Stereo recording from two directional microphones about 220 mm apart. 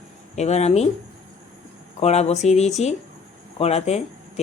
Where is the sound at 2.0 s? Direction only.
30° left (ahead or behind).